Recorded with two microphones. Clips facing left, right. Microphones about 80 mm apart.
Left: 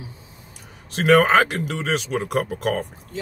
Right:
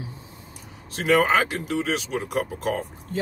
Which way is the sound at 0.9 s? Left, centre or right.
Left.